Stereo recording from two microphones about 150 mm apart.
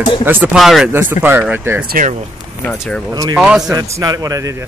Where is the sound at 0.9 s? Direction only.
15° right (ahead or behind).